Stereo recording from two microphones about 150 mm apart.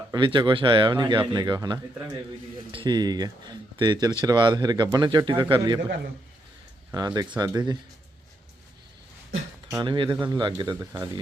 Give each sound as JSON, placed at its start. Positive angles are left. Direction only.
{"t": 0.1, "sound": "speech", "side_deg": -30}
{"t": 6.9, "sound": "speech", "side_deg": -25}
{"t": 9.8, "sound": "speech", "side_deg": -30}